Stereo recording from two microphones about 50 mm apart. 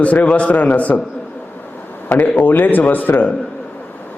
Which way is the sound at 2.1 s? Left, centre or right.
Left.